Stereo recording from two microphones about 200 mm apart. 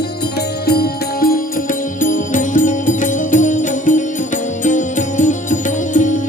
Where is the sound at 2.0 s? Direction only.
40° left (ahead or behind).